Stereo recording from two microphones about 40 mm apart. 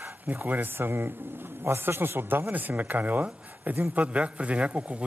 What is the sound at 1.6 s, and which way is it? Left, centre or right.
Speech, right.